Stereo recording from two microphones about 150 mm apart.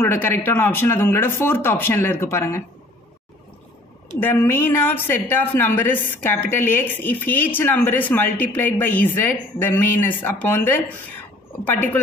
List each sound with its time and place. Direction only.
0.0 s a woman's voice: 15° left (ahead or behind)
4.2 s a woman's voice: 15° left (ahead or behind)